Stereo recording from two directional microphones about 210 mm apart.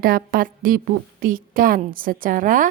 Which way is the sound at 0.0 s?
45° right (ahead or behind).